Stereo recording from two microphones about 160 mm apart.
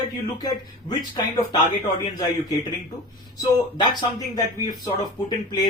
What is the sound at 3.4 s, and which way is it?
Speech, 25° left (ahead or behind).